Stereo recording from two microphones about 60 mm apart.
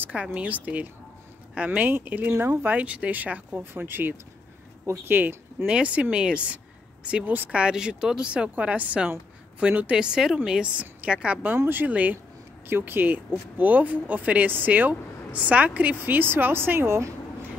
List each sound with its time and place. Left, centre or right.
0.0 s speech: right
2.8 s speech: right
3.7 s speech: right
5.7 s a woman's voice: centre
12.6 s speech: right
16.0 s speech: right